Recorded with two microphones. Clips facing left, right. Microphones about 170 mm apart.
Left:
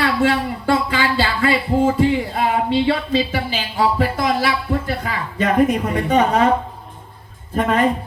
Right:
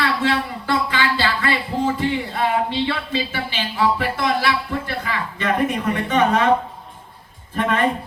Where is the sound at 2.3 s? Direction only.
40° left (ahead or behind).